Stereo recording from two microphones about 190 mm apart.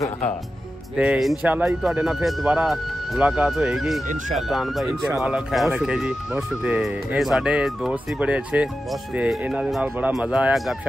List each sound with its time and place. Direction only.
0.9 s speech: 5° right (ahead or behind)